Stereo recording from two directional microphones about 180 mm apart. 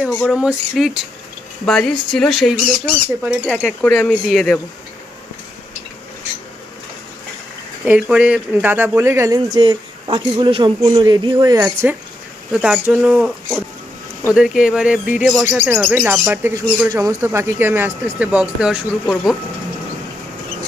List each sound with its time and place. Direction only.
0.0 s speech: centre (ahead or behind)
3.6 s speech: 10° left (ahead or behind)
7.8 s speech: 5° right (ahead or behind)